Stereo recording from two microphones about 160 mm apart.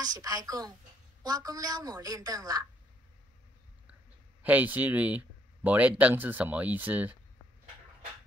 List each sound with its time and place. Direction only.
0.0 s a woman's voice: 25° right (ahead or behind)
4.4 s speech: 10° right (ahead or behind)